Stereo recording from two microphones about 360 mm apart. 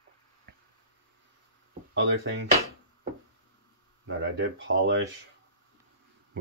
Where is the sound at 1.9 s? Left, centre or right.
Right.